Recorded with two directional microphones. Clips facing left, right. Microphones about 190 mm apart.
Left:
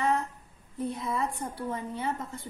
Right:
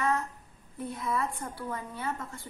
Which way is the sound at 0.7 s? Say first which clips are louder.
Left 1 dB; 20° left (ahead or behind).